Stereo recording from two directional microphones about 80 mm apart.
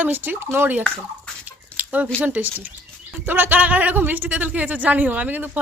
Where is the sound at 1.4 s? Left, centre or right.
Centre.